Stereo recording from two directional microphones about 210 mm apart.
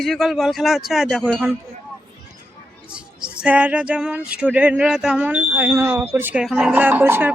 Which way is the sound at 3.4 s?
5° right (ahead or behind).